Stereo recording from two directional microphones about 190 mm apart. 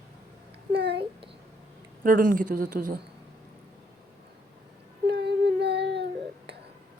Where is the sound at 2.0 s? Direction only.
45° right (ahead or behind).